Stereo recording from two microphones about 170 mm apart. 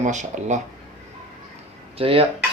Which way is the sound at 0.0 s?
45° right (ahead or behind).